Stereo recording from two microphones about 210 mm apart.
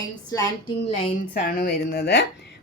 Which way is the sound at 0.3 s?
15° left (ahead or behind).